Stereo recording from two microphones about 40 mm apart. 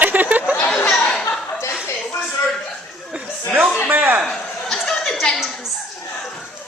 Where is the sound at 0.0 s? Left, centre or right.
Right.